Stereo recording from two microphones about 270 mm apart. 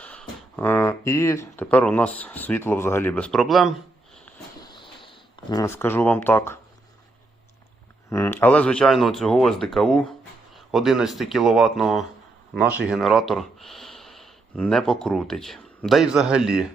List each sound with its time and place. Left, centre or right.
0.0 s speech: centre
4.6 s a sound: centre
5.0 s speech: centre
8.1 s speech: centre